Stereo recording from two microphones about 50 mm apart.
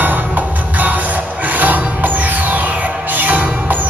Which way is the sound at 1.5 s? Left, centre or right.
Right.